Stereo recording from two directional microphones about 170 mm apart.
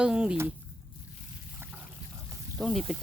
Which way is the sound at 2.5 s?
Centre (ahead or behind).